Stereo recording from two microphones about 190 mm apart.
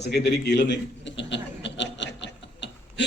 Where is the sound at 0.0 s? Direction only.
60° left (ahead or behind).